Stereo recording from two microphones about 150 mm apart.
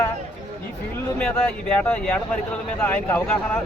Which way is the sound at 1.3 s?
5° left (ahead or behind).